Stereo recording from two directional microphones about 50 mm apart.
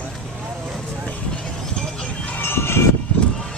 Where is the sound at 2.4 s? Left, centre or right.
Left.